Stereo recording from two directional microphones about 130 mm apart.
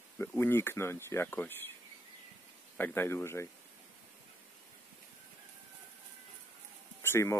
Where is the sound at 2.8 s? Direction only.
15° left (ahead or behind).